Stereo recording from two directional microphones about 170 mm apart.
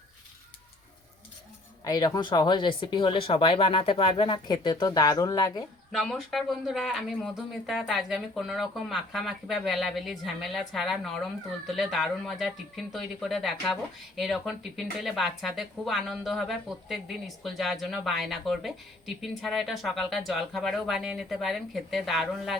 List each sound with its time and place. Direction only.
1.8 s speech: 25° left (ahead or behind)
5.9 s a woman's voice: centre (ahead or behind)